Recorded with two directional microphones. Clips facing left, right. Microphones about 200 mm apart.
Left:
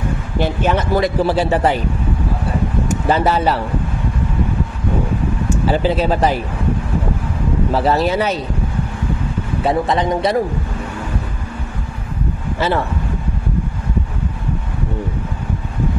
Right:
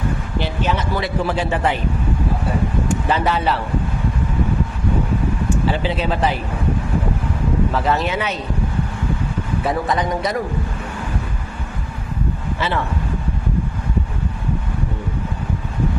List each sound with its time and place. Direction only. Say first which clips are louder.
0.4 s speech: left 5 dB; 50° left (ahead or behind)
2.9 s speech: left 4 dB; 40° left (ahead or behind)
5.7 s speech: left 8 dB; 40° left (ahead or behind)
7.7 s speech: left 4 dB; 35° left (ahead or behind)
9.6 s a man's voice: left 4 dB; 25° left (ahead or behind)